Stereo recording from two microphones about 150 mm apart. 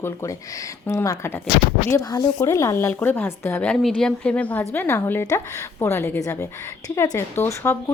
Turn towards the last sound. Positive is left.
turn(degrees=15)  # may be behind; listen again after turning